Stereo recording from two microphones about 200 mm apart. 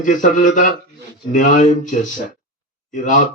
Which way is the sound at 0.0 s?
40° left (ahead or behind).